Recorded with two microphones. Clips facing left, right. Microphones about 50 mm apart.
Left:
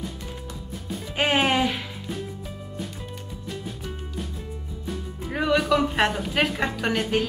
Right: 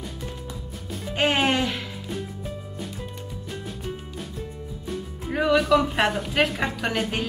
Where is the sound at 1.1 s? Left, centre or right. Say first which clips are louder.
Even; centre.